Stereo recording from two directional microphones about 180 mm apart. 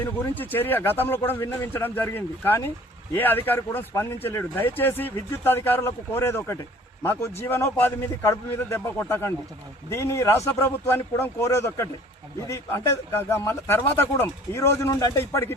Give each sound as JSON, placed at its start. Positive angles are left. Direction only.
{"t": 0.0, "sound": "speech", "side_deg": 10}